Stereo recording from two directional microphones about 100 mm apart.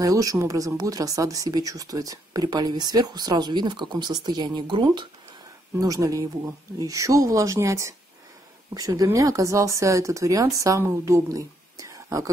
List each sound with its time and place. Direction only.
0.0 s speech: 35° right (ahead or behind)
5.8 s speech: 35° right (ahead or behind)